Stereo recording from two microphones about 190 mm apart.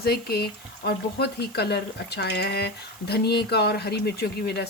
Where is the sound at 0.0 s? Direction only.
55° left (ahead or behind).